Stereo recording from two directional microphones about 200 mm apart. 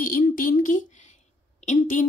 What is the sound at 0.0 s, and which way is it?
A woman's voice, 45° left (ahead or behind).